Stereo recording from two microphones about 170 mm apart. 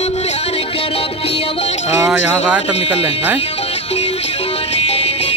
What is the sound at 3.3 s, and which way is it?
Music, 35° left (ahead or behind).